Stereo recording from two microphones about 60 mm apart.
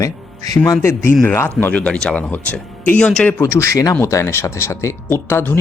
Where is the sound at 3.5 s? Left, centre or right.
Left.